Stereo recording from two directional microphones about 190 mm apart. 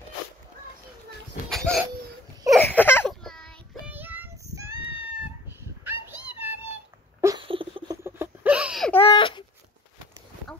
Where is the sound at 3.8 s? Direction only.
10° right (ahead or behind).